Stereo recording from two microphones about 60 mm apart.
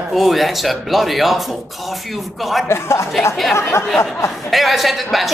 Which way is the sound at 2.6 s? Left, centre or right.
Left.